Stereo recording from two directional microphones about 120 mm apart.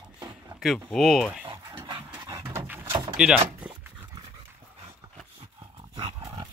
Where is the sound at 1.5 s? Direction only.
40° right (ahead or behind).